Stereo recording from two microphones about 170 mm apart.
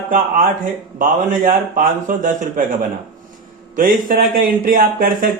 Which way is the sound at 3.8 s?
55° right (ahead or behind).